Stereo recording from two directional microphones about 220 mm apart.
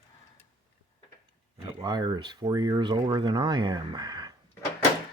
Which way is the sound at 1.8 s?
20° right (ahead or behind).